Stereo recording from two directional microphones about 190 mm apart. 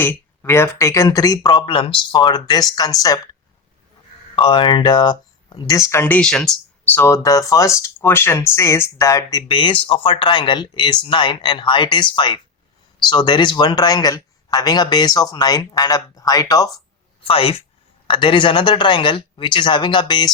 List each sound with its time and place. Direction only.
0.0 s speech: 10° left (ahead or behind)
4.4 s speech: 25° left (ahead or behind); by 6.5 s 5° left (ahead or behind)
6.9 s speech: 15° left (ahead or behind)
17.2 s speech: 30° left (ahead or behind)